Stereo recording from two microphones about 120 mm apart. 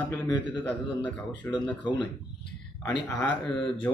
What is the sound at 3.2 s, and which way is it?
Speech, 10° left (ahead or behind).